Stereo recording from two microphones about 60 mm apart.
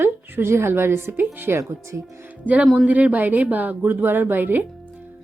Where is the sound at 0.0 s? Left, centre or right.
Right.